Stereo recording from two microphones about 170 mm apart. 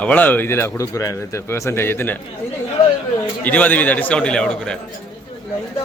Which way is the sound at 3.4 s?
10° left (ahead or behind).